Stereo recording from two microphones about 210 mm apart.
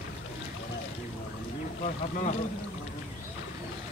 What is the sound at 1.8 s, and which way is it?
Speech, 35° left (ahead or behind).